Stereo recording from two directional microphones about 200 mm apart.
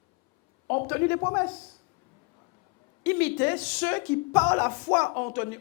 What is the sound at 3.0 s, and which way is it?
Speech, 10° left (ahead or behind).